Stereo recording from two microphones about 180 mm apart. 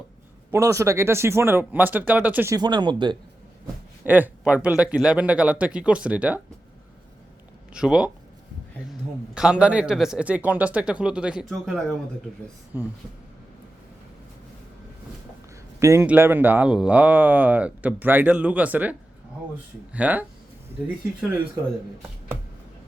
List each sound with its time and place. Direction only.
0.5 s speech: 15° right (ahead or behind)
2.6 s speech: 25° right (ahead or behind)
4.0 s speech: 10° right (ahead or behind)
7.7 s a man's voice: 5° right (ahead or behind)
12.7 s speech: 10° right (ahead or behind)
15.8 s speech: 15° right (ahead or behind)